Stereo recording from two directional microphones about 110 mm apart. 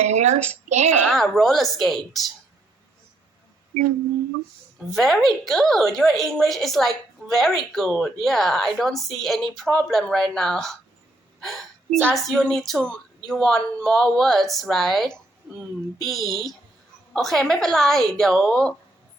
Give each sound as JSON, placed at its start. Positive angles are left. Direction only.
{"t": 0.0, "sound": "a woman's voice", "side_deg": -90}
{"t": 1.0, "sound": "a woman's voice", "side_deg": 5}
{"t": 4.9, "sound": "a woman's voice", "side_deg": 0}
{"t": 11.3, "sound": "hiccup", "side_deg": 5}
{"t": 12.1, "sound": "a woman's voice", "side_deg": 0}